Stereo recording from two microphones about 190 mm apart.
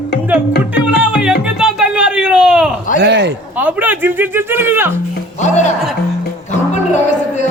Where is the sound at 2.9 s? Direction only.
65° right (ahead or behind).